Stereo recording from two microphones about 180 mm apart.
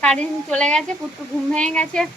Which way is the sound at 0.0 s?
5° left (ahead or behind).